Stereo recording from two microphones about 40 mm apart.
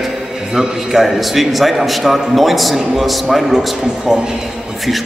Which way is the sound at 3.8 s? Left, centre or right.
Centre.